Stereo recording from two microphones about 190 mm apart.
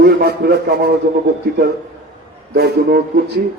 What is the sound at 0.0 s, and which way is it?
Speech, 55° right (ahead or behind).